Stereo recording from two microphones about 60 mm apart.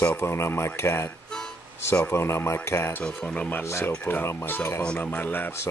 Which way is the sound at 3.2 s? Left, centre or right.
Left.